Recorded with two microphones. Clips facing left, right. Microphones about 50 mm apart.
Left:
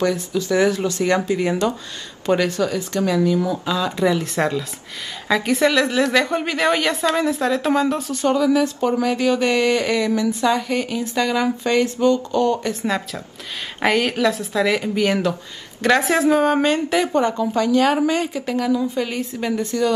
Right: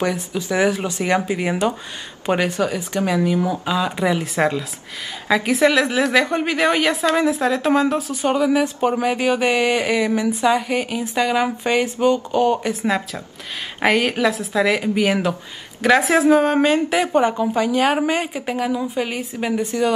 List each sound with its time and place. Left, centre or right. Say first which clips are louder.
0.3 s a woman's voice: even; centre
8.2 s speech: left 1 dB; right
12.5 s a woman's voice: right 2 dB; centre
17.0 s speech: right 1 dB; centre